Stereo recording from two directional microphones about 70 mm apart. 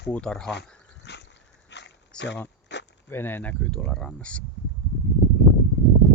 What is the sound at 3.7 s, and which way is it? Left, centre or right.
Speech, centre.